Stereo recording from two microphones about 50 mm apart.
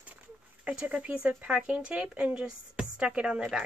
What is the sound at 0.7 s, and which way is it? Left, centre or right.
Speech, right.